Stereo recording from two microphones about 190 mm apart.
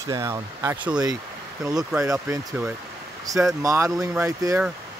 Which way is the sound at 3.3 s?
20° right (ahead or behind).